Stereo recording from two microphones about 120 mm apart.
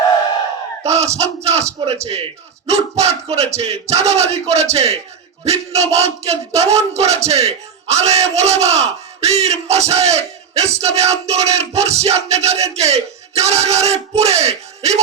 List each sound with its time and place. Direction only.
0.9 s a man's voice: 65° right (ahead or behind)